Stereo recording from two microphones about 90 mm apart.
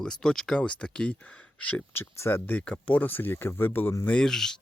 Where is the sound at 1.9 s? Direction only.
25° left (ahead or behind).